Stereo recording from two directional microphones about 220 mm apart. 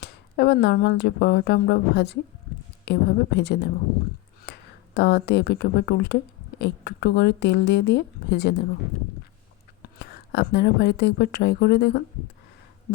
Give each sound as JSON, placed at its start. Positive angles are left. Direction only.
{"t": 0.0, "sound": "speech", "side_deg": 50}
{"t": 4.5, "sound": "a sound", "side_deg": 50}
{"t": 4.9, "sound": "speech", "side_deg": 50}
{"t": 10.0, "sound": "speech", "side_deg": 50}